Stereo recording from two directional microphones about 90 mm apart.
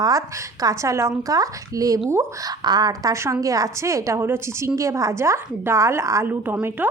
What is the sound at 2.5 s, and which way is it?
A woman's voice, 50° right (ahead or behind).